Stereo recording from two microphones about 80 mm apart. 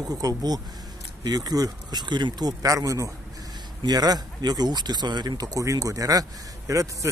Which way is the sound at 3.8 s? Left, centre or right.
Right.